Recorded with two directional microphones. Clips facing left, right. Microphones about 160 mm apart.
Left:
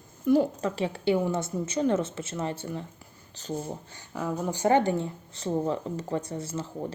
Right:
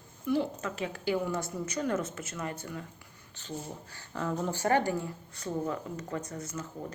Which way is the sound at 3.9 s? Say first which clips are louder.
Even; 15° left (ahead or behind).